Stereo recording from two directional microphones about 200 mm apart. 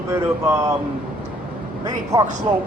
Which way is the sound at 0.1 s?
15° right (ahead or behind).